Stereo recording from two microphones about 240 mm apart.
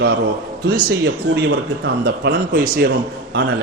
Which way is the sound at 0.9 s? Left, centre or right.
Right.